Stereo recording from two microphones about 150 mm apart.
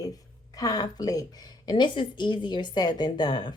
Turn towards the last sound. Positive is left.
turn(degrees=30)  # may be behind; listen again after turning